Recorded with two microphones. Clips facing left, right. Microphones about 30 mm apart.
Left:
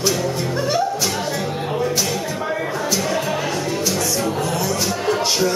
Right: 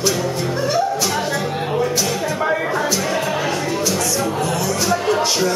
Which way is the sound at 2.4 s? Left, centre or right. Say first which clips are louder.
Right 4 dB; right.